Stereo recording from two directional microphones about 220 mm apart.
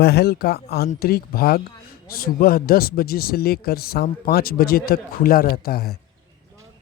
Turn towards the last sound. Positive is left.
turn(degrees=45)  # may be behind; listen again after turning